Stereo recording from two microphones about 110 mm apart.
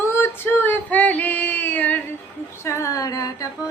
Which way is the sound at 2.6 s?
25° left (ahead or behind).